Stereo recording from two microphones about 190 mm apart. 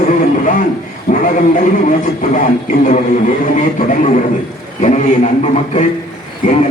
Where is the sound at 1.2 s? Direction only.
40° left (ahead or behind).